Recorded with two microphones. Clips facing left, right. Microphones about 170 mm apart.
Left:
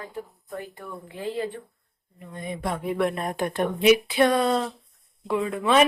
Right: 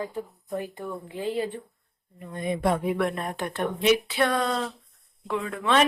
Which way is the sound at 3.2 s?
15° left (ahead or behind).